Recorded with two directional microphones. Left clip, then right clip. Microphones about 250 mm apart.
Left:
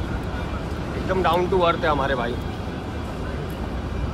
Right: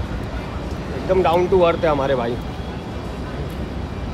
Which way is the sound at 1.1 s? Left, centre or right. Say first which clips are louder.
Right 5 dB; right.